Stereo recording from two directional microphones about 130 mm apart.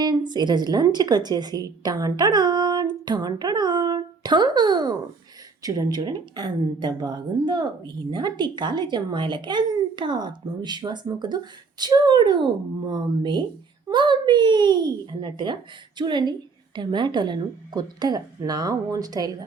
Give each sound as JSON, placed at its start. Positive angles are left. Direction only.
{"t": 0.0, "sound": "a woman's voice", "side_deg": -35}